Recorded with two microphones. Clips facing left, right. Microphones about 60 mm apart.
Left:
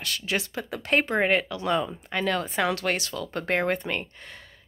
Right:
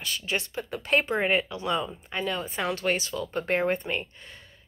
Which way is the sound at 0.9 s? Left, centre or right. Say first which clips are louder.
Left 2 dB; left.